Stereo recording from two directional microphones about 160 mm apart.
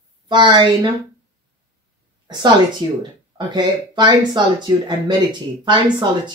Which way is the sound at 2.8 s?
30° right (ahead or behind).